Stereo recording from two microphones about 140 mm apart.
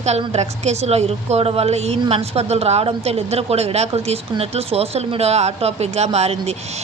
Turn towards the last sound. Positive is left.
turn(degrees=-50)  # may be behind; listen again after turning